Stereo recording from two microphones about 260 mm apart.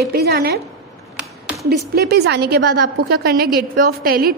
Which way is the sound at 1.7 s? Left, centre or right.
Right.